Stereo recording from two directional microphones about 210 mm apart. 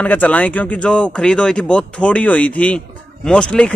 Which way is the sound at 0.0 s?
10° left (ahead or behind).